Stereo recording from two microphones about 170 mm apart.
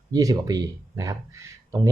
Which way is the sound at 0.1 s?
20° right (ahead or behind).